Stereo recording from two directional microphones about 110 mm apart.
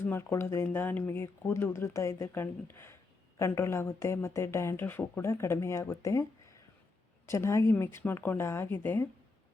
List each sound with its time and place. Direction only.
0.0 s speech: 20° left (ahead or behind)